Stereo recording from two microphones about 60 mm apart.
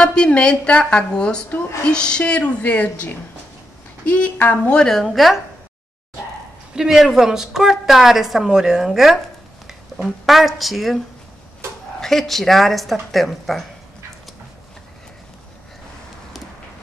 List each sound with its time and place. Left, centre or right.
0.0 s a woman's voice: centre
4.5 s a woman's voice: centre
5.0 s speech: centre
6.7 s a woman's voice: centre
10.2 s speech: centre
12.0 s speech: centre